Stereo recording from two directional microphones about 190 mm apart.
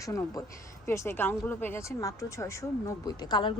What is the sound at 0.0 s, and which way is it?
Speech, 15° left (ahead or behind).